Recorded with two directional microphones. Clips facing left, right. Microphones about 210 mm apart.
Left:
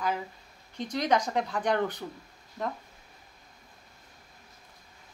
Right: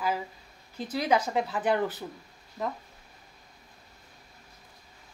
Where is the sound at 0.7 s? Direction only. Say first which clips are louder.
Even; 5° right (ahead or behind).